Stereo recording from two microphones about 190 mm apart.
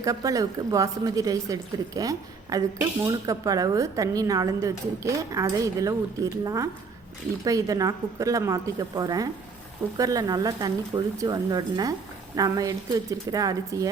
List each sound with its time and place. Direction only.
0.0 s a woman's voice: 15° right (ahead or behind)